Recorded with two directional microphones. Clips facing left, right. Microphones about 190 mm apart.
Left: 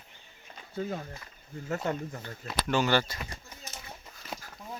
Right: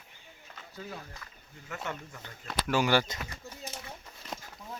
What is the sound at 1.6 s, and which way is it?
Speech, 35° left (ahead or behind).